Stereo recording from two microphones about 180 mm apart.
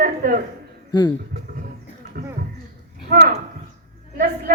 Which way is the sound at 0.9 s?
25° left (ahead or behind).